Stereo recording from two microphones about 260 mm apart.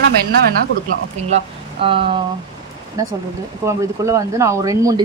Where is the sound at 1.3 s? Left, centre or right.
Right.